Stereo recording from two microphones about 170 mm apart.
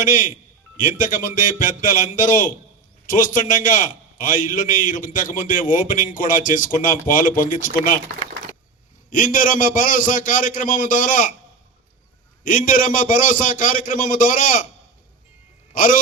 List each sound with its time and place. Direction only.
0.0 s a man's voice: 50° left (ahead or behind)
9.0 s a man's voice: 50° left (ahead or behind)
12.4 s a man's voice: 50° left (ahead or behind)
15.7 s a man's voice: 55° left (ahead or behind)